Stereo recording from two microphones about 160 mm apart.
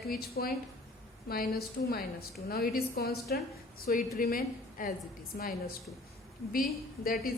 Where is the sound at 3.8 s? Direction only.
60° left (ahead or behind).